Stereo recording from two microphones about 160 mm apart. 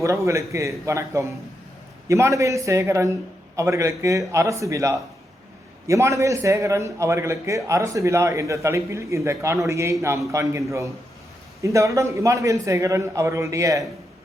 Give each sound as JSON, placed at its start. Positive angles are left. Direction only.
{"t": 0.0, "sound": "a man's voice", "side_deg": -20}
{"t": 11.6, "sound": "a man's voice", "side_deg": -20}